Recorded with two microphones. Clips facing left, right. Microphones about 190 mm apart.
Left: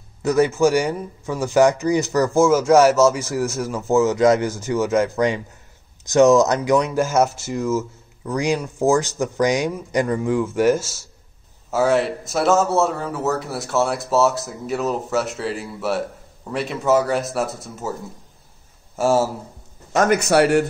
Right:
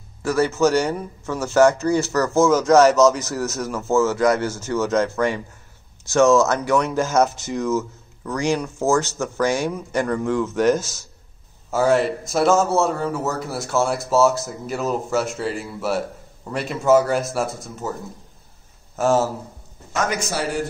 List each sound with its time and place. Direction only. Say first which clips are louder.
0.2 s a man's voice: left 2 dB; 20° left (ahead or behind)
20.0 s a man's voice: left 8 dB; 60° left (ahead or behind)